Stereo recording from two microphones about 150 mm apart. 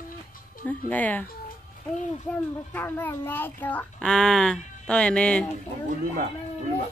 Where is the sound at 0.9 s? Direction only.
10° left (ahead or behind).